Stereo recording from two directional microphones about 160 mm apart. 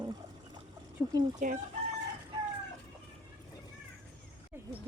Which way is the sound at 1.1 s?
25° right (ahead or behind).